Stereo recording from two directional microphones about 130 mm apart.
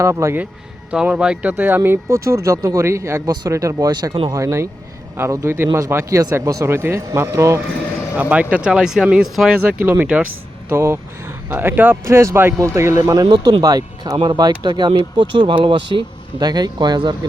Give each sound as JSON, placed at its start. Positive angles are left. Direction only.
{"t": 0.0, "sound": "speech", "side_deg": -20}
{"t": 0.9, "sound": "speech", "side_deg": -10}
{"t": 8.1, "sound": "speech", "side_deg": -10}
{"t": 9.8, "sound": "speech", "side_deg": -15}
{"t": 13.2, "sound": "speech", "side_deg": -35}